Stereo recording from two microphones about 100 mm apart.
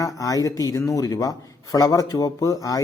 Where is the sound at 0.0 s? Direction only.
35° left (ahead or behind).